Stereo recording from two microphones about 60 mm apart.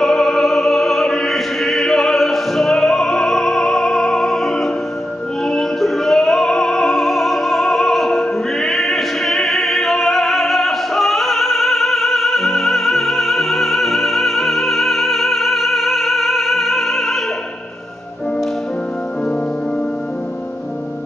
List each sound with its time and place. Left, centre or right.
0.0 s opera: centre
5.5 s music: centre